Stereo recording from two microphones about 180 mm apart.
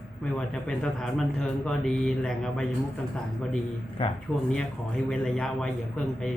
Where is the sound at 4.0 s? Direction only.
30° left (ahead or behind).